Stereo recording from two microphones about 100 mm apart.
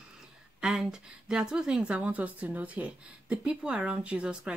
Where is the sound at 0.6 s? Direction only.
5° right (ahead or behind).